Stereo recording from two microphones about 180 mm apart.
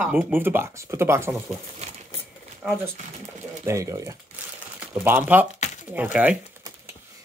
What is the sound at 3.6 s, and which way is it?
Speech, 15° right (ahead or behind).